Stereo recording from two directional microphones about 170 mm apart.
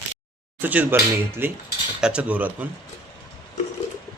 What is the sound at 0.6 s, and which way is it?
Speech, 10° right (ahead or behind).